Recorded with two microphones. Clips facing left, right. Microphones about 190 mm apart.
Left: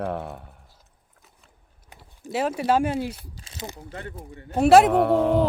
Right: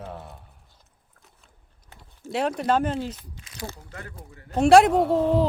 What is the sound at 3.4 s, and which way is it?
Speech, 30° left (ahead or behind).